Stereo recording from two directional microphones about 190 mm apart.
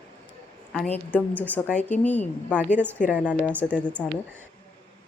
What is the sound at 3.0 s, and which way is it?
Speech, 45° left (ahead or behind).